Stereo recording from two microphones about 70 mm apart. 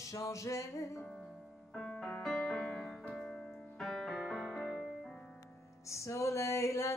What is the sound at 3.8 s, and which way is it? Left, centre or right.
Music, centre.